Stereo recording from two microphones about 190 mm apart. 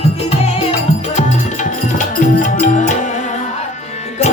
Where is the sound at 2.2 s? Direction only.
40° left (ahead or behind).